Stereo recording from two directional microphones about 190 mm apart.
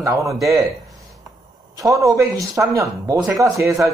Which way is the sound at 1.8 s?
15° right (ahead or behind).